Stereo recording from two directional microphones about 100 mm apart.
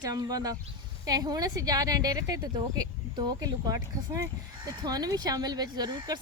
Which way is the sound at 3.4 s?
40° right (ahead or behind).